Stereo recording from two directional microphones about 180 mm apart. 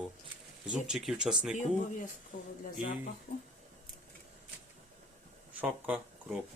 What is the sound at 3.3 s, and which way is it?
Speech, 65° left (ahead or behind).